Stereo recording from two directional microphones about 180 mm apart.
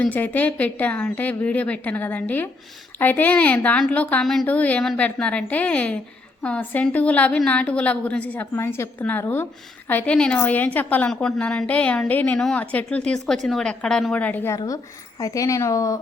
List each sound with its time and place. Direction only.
0.0 s a woman's voice: 10° left (ahead or behind)